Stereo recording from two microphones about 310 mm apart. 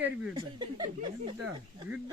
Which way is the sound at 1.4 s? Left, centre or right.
Centre.